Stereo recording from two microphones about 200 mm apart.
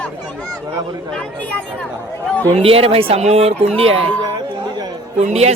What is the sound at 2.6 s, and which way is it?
Speech, 30° right (ahead or behind).